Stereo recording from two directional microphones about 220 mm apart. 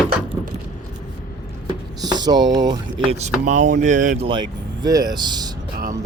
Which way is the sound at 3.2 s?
35° right (ahead or behind).